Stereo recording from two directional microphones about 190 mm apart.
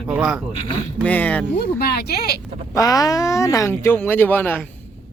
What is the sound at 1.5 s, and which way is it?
Speech, 60° left (ahead or behind).